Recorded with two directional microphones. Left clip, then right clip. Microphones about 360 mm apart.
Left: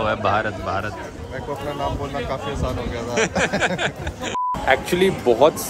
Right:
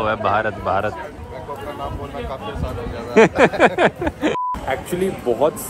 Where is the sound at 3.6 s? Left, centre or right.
Centre.